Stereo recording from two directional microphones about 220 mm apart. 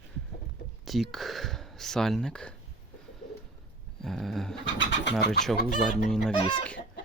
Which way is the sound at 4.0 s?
Centre (ahead or behind).